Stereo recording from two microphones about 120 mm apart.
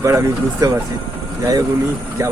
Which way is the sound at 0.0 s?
25° right (ahead or behind).